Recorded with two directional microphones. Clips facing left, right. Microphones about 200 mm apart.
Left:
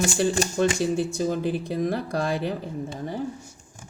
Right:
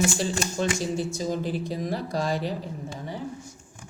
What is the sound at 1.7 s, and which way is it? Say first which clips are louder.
Speech: left 3 dB; 55° left (ahead or behind).